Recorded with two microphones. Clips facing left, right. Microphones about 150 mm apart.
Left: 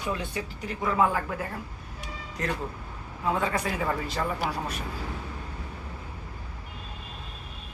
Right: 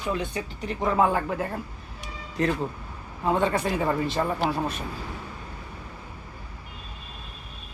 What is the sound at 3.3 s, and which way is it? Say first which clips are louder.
Speech: right 6 dB; 25° right (ahead or behind).